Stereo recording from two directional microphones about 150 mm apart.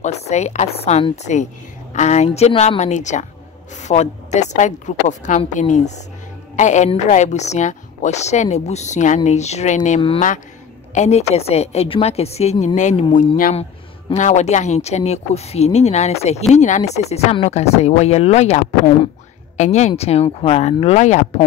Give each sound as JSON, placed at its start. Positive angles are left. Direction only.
{"t": 0.0, "sound": "a woman's voice", "side_deg": 50}